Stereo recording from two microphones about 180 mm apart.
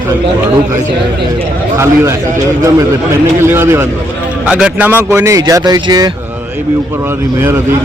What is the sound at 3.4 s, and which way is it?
A man's voice, 15° right (ahead or behind).